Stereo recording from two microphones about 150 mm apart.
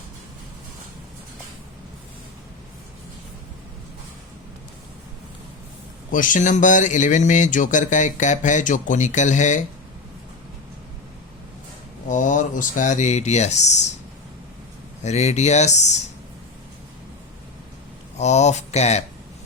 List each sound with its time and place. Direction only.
6.1 s a man's voice: 60° left (ahead or behind)
12.0 s speech: 60° left (ahead or behind)
15.0 s speech: 50° left (ahead or behind)
18.2 s speech: 50° left (ahead or behind)